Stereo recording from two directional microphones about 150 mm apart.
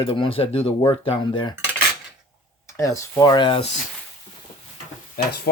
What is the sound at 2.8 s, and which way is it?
Speech, 20° left (ahead or behind).